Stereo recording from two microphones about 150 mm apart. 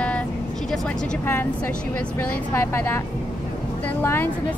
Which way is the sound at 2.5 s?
15° left (ahead or behind).